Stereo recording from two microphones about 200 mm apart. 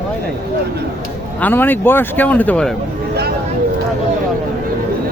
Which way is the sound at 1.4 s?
10° left (ahead or behind).